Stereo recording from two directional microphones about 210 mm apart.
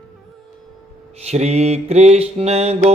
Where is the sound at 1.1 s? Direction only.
30° right (ahead or behind).